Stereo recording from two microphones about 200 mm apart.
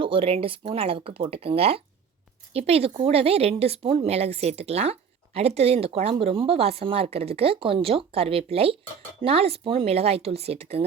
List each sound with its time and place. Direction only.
0.0 s speech: 25° right (ahead or behind)